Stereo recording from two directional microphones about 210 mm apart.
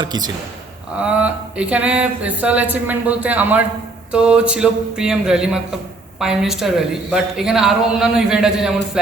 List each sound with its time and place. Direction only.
0.0 s a man's voice: 20° right (ahead or behind)
0.9 s a sound: 5° right (ahead or behind)
4.1 s speech: 5° right (ahead or behind)